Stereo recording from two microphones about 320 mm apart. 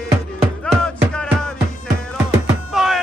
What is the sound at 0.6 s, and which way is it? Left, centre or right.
Music, centre.